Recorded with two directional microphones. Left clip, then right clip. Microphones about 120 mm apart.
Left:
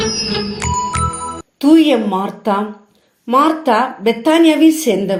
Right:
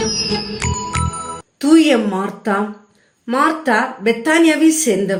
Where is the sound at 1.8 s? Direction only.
15° left (ahead or behind).